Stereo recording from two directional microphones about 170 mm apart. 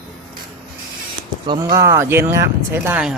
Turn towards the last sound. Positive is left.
turn(degrees=-15)  # may be behind; listen again after turning